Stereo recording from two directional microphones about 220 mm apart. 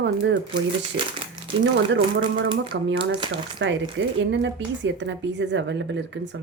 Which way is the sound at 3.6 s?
55° right (ahead or behind).